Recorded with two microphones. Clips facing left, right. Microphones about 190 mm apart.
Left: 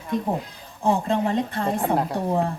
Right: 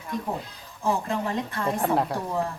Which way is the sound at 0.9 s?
30° left (ahead or behind).